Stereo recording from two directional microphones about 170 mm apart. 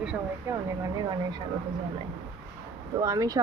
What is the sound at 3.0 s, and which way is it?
Speech, 20° right (ahead or behind).